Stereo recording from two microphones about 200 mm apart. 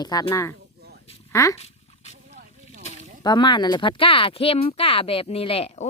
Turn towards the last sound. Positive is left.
turn(degrees=30)  # may be behind; listen again after turning